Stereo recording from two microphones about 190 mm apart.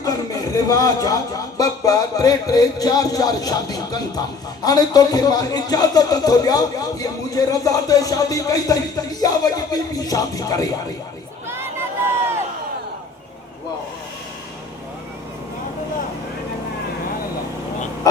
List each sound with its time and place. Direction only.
0.0 s speech: 20° left (ahead or behind)
11.4 s crowd: 15° right (ahead or behind)
18.0 s owl: 20° left (ahead or behind)